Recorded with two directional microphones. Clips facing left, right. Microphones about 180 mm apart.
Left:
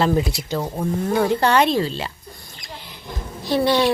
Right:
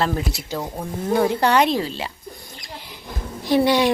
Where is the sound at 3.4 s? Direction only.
15° right (ahead or behind).